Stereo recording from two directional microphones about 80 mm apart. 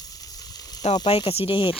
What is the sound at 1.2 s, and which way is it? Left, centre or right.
Speech, left.